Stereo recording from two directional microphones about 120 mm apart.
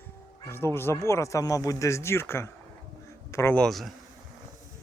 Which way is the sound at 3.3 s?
25° left (ahead or behind).